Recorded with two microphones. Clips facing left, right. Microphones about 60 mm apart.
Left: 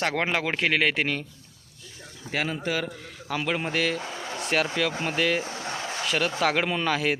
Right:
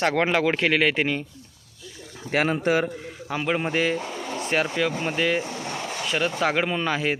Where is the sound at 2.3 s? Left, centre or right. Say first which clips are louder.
Right 6 dB; right.